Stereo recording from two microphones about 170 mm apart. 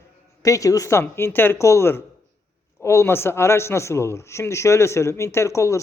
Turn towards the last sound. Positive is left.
turn(degrees=20)  # may be behind; listen again after turning